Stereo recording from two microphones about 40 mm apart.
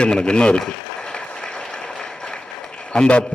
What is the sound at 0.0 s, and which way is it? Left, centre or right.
Speech, left.